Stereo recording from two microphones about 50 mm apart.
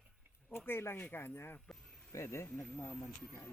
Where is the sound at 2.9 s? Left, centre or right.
Centre.